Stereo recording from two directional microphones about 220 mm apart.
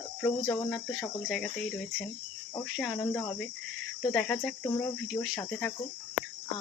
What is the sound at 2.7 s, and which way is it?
Cricket, centre (ahead or behind).